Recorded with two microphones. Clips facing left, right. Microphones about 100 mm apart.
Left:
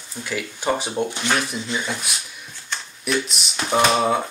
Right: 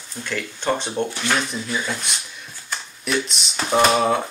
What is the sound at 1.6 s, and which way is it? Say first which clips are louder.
Speech: even; 20° left (ahead or behind).